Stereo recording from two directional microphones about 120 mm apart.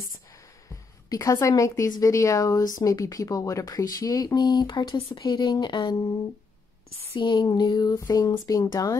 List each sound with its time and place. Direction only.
1.0 s speech: 30° left (ahead or behind)
7.2 s speech: 40° left (ahead or behind)